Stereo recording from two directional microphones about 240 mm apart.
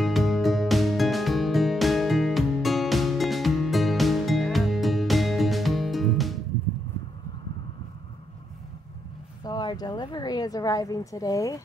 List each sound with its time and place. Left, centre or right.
0.0 s music: centre
9.4 s speech: centre